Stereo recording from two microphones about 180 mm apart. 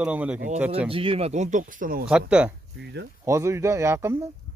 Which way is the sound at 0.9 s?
30° right (ahead or behind).